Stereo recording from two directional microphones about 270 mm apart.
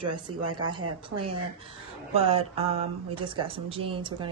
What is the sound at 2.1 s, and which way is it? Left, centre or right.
Speech, right.